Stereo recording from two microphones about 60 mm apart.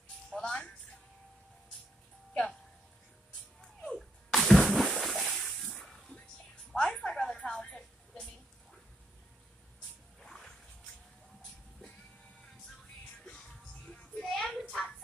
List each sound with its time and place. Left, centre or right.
0.3 s music: centre
3.6 s splash: centre
6.7 s music: centre
10.2 s music: centre
13.8 s music: centre
14.2 s a sound: centre